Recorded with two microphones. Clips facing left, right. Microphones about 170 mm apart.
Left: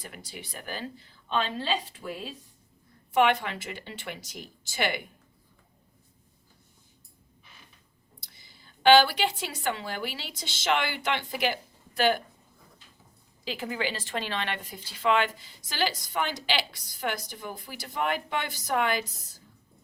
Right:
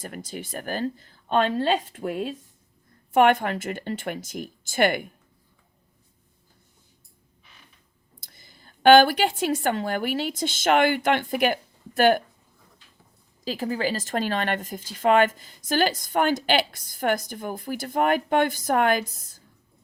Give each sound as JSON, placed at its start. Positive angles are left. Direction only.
{"t": 0.0, "sound": "speech", "side_deg": -45}
{"t": 8.2, "sound": "a woman's voice", "side_deg": -50}
{"t": 13.4, "sound": "speech", "side_deg": -40}